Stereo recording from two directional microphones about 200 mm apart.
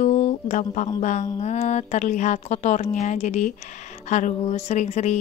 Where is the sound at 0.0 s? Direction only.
35° left (ahead or behind).